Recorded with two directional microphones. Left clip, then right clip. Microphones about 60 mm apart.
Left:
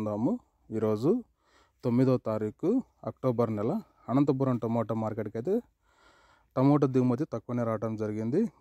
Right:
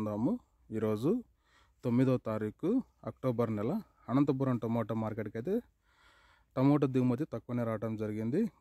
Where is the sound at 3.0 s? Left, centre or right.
Left.